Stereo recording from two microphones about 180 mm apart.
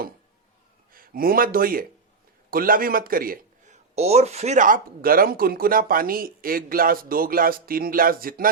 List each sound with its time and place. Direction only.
0.9 s a man's voice: 55° right (ahead or behind)
3.9 s speech: 35° right (ahead or behind); by 8.4 s 50° right (ahead or behind)